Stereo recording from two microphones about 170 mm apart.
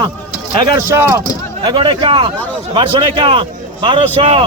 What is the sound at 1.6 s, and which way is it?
A man's voice, 30° right (ahead or behind).